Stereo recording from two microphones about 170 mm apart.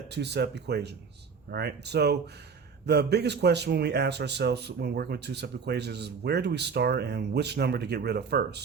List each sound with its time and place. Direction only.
0.1 s speech: 80° right
1.5 s a man's voice: 70° right (ahead or behind)